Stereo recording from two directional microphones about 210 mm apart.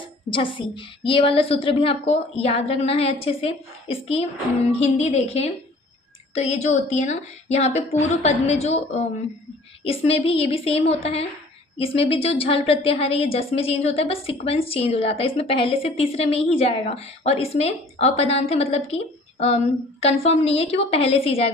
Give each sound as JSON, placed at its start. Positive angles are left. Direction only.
{"t": 0.3, "sound": "a woman's voice", "side_deg": 25}